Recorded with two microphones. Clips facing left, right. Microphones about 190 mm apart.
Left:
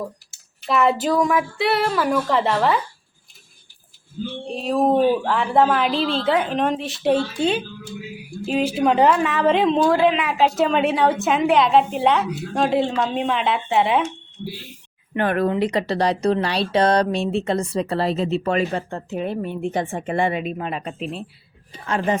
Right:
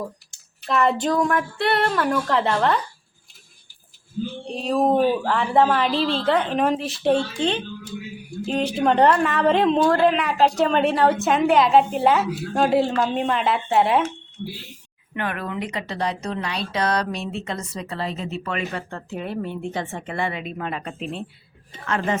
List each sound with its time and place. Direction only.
0.0 s speech: 5° left (ahead or behind)
4.5 s speech: centre (ahead or behind)
15.1 s speech: 40° left (ahead or behind)
18.8 s a woman's voice: 20° left (ahead or behind)
21.0 s speech: centre (ahead or behind)